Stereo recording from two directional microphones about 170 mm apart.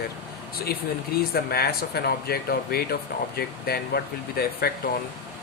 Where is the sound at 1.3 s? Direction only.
65° left (ahead or behind).